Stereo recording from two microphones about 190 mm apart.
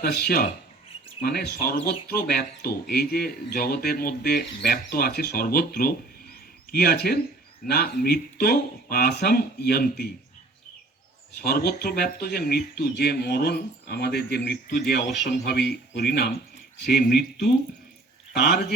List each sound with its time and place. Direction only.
0.0 s speech: 50° left (ahead or behind)
11.4 s speech: 55° left (ahead or behind)